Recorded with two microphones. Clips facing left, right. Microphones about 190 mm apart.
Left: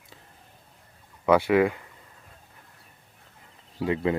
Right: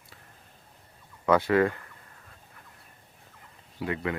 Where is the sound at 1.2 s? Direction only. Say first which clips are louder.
Left 2 dB; 10° left (ahead or behind).